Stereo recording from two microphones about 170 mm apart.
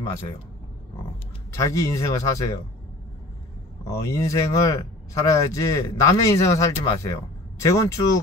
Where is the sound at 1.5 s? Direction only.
20° left (ahead or behind).